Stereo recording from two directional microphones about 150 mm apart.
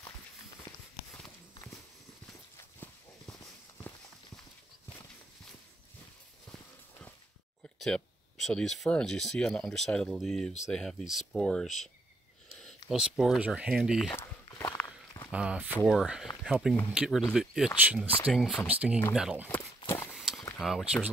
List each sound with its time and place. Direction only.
2.5 s walk: 15° left (ahead or behind)
6.5 s horse: 10° left (ahead or behind)
7.8 s speech: 5° left (ahead or behind)
12.9 s speech: 5° right (ahead or behind)
14.1 s walk: 20° left (ahead or behind)
15.3 s speech: 10° right (ahead or behind)
18.3 s speech: centre (ahead or behind)
19.9 s walk: 15° left (ahead or behind)
20.2 s a sound: centre (ahead or behind)
20.5 s speech: centre (ahead or behind)